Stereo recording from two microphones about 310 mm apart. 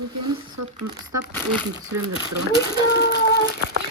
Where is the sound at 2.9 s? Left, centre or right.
Left.